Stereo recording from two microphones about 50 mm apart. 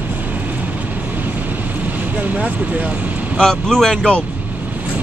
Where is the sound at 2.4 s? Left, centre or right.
Right.